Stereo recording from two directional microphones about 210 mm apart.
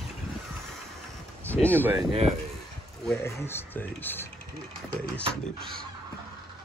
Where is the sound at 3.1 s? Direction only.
10° left (ahead or behind).